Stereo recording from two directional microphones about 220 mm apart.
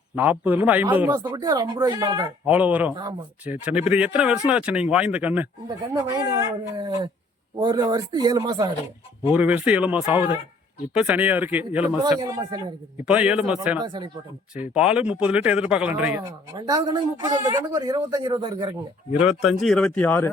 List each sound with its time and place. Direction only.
0.2 s speech: 10° right (ahead or behind)
2.9 s speech: 20° right (ahead or behind)
3.4 s speech: 5° right (ahead or behind)
9.3 s speech: 5° right (ahead or behind)
13.8 s speech: 20° right (ahead or behind)
14.5 s speech: 5° right (ahead or behind)
16.2 s speech: 20° right (ahead or behind)
19.2 s speech: centre (ahead or behind)